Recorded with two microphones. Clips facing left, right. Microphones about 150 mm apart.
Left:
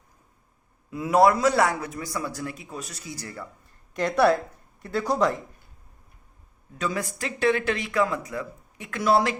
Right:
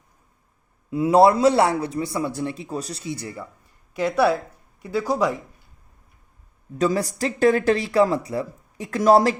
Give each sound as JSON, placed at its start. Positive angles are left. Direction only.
{"t": 0.9, "sound": "a man's voice", "side_deg": -30}
{"t": 3.9, "sound": "speech", "side_deg": -5}
{"t": 6.7, "sound": "speech", "side_deg": -35}